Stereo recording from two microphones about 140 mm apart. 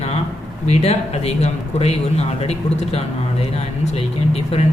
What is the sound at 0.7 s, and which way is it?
Speech, 50° left (ahead or behind).